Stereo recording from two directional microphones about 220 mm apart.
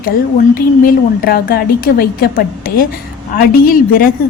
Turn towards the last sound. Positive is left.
turn(degrees=40)  # may be behind; listen again after turning